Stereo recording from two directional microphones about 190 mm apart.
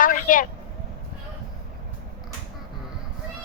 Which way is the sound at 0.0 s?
45° left (ahead or behind).